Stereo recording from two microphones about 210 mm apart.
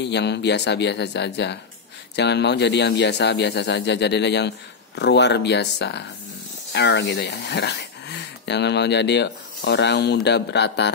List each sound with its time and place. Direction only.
0.0 s speech: 55° left (ahead or behind)